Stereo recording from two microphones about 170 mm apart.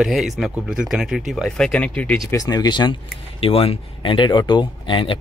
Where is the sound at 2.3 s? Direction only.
20° left (ahead or behind).